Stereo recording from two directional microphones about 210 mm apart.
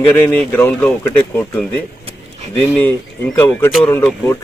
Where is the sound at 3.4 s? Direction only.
10° left (ahead or behind).